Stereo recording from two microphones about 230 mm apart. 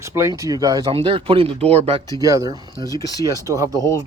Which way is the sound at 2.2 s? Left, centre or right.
Centre.